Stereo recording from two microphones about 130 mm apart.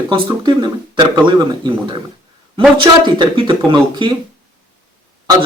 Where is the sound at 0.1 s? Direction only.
35° right (ahead or behind).